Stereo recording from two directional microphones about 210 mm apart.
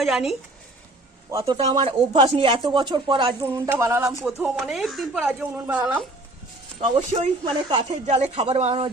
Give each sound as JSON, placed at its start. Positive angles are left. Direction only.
{"t": 0.0, "sound": "speech", "side_deg": 0}
{"t": 1.3, "sound": "speech", "side_deg": -15}
{"t": 1.5, "sound": "speech", "side_deg": -25}
{"t": 3.4, "sound": "speech", "side_deg": -10}
{"t": 7.1, "sound": "speech", "side_deg": -35}